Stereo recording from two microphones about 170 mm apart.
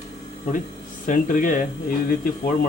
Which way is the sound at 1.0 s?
50° left (ahead or behind).